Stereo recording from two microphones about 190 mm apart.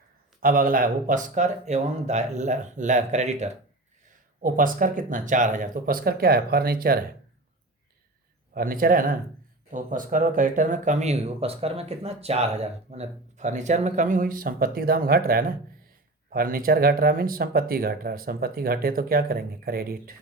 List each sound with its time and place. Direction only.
0.3 s speech: 50° right (ahead or behind)
8.5 s speech: 50° right (ahead or behind)